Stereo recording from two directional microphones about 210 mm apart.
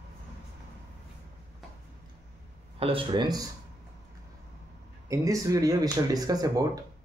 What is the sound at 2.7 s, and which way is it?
Speech, 25° right (ahead or behind).